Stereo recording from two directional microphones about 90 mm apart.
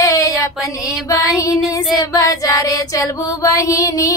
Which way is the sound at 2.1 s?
40° left (ahead or behind).